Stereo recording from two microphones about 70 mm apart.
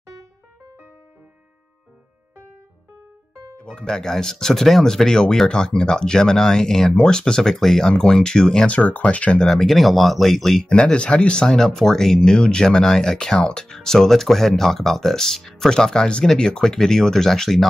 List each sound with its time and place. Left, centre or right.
3.5 s speech: centre
8.7 s speech: left
9.5 s speech: centre